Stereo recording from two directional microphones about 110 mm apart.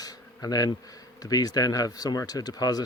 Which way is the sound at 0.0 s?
35° left (ahead or behind).